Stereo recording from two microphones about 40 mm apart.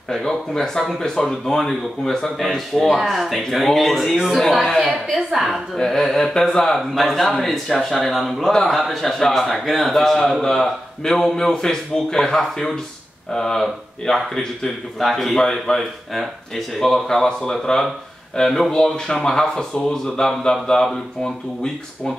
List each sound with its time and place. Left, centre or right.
0.1 s a man's voice: centre
5.8 s a man's voice: centre
15.0 s a man's voice: centre
16.8 s a man's voice: centre